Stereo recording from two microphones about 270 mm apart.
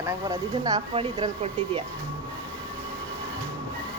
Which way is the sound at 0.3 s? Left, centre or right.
Centre.